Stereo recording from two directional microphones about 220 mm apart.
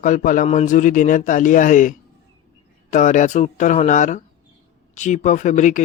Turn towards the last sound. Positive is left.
turn(degrees=35)  # may be behind; listen again after turning